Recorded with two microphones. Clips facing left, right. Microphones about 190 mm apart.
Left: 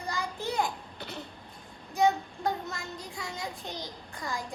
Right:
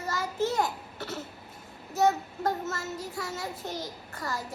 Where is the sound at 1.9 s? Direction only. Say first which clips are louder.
Right 1 dB; 5° right (ahead or behind).